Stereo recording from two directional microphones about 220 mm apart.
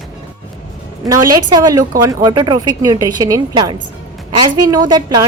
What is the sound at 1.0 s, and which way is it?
A woman's voice, 15° right (ahead or behind).